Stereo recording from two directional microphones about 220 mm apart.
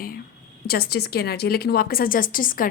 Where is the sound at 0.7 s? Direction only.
45° left (ahead or behind).